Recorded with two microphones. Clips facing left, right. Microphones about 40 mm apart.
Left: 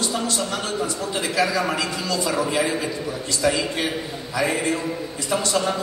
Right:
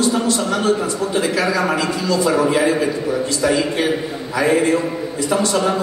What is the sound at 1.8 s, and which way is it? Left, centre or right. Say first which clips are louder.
Speech: right 6 dB; right.